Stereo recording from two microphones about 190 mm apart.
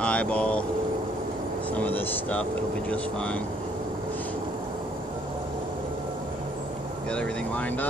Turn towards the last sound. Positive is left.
turn(degrees=5)  # may be behind; listen again after turning